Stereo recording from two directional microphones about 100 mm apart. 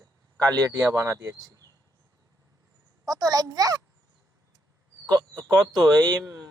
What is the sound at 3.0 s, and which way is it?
Speech, 40° right (ahead or behind).